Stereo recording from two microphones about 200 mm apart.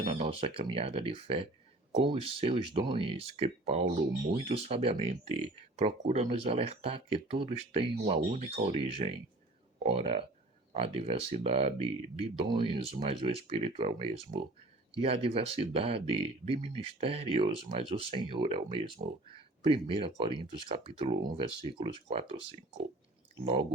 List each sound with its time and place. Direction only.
0.0 s speech: 30° right (ahead or behind)